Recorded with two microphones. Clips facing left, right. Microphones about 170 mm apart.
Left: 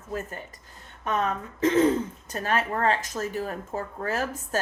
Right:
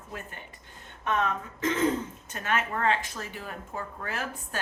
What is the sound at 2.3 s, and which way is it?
Speech, 35° left (ahead or behind).